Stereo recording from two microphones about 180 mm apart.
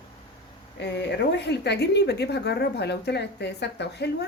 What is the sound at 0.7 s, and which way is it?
Speech, 75° left (ahead or behind).